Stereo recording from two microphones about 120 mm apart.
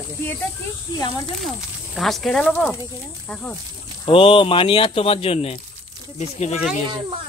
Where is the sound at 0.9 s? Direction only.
30° left (ahead or behind).